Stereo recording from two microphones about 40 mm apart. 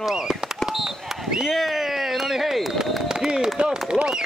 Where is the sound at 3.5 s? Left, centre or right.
Right.